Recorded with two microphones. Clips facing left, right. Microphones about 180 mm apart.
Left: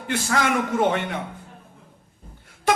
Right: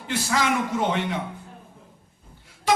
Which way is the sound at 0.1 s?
50° left (ahead or behind).